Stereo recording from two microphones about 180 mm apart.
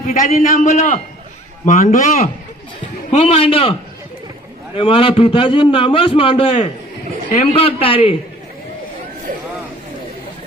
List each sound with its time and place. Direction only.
0.0 s a man's voice: 50° left (ahead or behind); by 3.8 s 30° left (ahead or behind)
4.8 s a man's voice: 30° left (ahead or behind)